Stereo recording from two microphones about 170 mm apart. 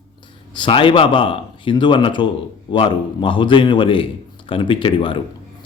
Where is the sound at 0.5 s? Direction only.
30° left (ahead or behind).